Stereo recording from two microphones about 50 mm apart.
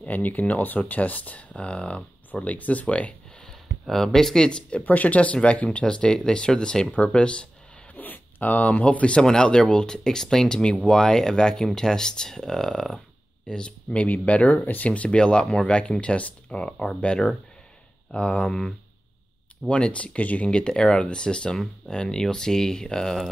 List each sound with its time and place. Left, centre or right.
0.0 s speech: left
3.9 s speech: centre
4.5 s speech: left
4.8 s speech: left
7.9 s speech: left
9.2 s speech: centre
16.7 s speech: centre